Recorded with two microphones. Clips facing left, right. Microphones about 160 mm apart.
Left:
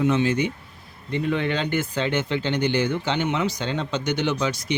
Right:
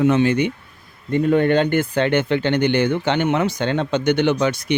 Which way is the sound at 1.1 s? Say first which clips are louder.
Right 8 dB; 50° right (ahead or behind).